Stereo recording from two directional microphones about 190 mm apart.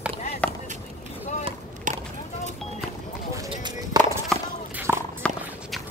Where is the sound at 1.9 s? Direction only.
45° right (ahead or behind).